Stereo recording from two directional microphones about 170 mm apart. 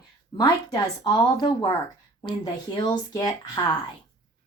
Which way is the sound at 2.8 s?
25° left (ahead or behind).